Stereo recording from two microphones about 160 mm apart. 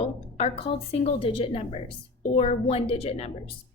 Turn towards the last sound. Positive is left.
turn(degrees=40)  # may be behind; listen again after turning